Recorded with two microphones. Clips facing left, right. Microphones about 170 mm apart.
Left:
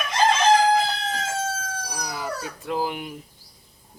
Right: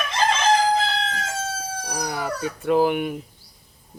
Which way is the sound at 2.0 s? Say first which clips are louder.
Right 5 dB; 70° right (ahead or behind).